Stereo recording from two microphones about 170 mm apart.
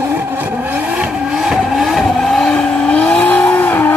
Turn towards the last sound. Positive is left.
turn(degrees=10)  # may be behind; listen again after turning